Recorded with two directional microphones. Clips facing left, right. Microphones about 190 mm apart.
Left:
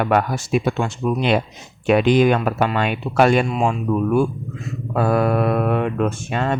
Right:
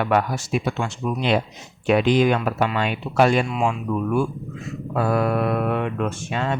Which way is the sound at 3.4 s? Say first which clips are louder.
Left 3 dB; 40° left (ahead or behind).